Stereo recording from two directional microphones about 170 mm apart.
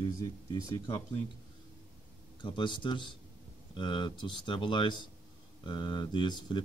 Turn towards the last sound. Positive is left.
turn(degrees=25)  # may be behind; listen again after turning